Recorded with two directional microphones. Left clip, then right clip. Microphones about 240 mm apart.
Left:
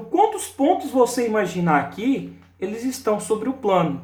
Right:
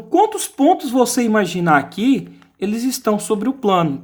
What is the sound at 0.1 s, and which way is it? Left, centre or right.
Speech, right.